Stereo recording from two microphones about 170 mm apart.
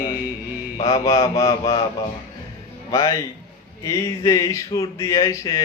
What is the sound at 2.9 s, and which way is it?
Speech, 20° left (ahead or behind).